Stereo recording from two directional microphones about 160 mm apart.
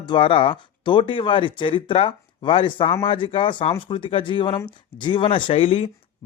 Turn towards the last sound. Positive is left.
turn(degrees=35)  # may be behind; listen again after turning